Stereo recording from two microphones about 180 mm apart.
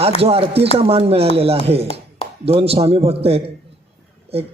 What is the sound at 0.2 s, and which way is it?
Speech, 35° right (ahead or behind).